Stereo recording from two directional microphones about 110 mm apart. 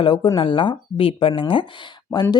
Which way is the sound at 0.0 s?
50° left (ahead or behind).